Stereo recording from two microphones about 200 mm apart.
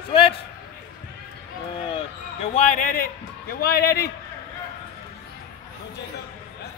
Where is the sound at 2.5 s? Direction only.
40° left (ahead or behind).